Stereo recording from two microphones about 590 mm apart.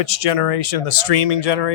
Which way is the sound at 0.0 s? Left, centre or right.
Left.